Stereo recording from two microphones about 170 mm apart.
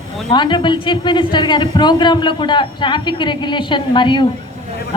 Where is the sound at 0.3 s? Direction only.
25° left (ahead or behind).